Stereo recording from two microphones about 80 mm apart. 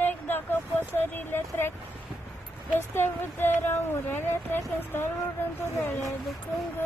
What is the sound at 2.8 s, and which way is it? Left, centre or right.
Speech, left.